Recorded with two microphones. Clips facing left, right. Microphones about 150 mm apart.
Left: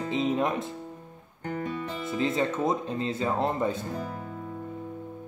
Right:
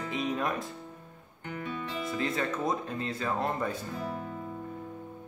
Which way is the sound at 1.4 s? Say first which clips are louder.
Left 5 dB; 40° left (ahead or behind).